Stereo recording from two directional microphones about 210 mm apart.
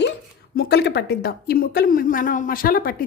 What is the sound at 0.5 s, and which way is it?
A woman's voice, 50° left (ahead or behind).